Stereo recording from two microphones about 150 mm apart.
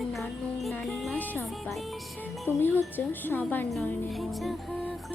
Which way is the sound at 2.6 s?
15° left (ahead or behind).